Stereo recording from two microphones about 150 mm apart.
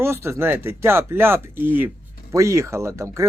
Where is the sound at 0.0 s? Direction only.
15° right (ahead or behind).